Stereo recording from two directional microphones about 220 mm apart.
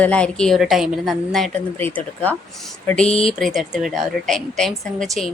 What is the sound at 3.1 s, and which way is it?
Speech, 25° left (ahead or behind).